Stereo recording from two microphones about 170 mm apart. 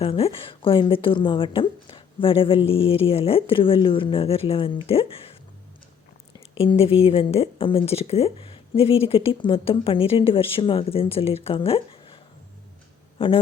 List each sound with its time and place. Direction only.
0.0 s a woman's voice: 35° left (ahead or behind)
6.6 s a woman's voice: 35° left (ahead or behind)